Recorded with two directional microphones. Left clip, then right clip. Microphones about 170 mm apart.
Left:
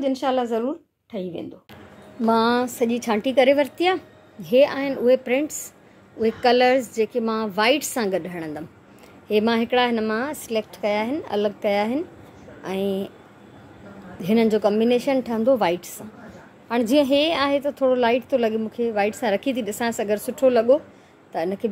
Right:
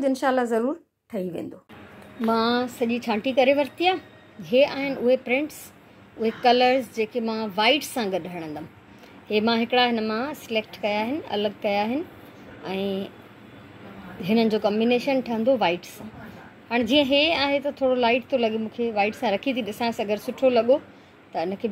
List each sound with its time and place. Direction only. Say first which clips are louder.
0.0 s a woman's voice: even; centre (ahead or behind)
2.2 s a woman's voice: left 3 dB; 20° left (ahead or behind)
14.2 s a woman's voice: left 3 dB; 15° left (ahead or behind)